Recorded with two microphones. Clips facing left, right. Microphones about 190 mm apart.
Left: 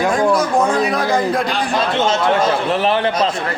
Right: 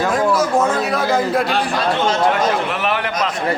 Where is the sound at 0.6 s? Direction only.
5° right (ahead or behind).